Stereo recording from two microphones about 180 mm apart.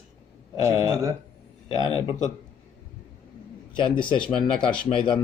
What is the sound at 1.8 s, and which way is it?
Speech, 30° left (ahead or behind).